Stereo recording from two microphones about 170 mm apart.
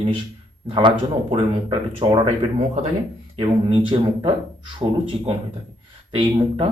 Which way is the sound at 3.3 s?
30° right (ahead or behind).